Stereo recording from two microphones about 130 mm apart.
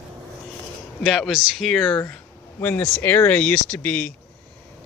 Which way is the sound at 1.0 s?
Centre (ahead or behind).